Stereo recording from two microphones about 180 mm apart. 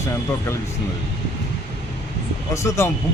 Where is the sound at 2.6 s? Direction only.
15° left (ahead or behind).